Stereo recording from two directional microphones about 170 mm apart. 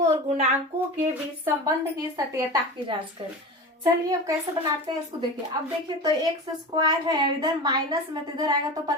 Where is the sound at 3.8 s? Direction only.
20° right (ahead or behind).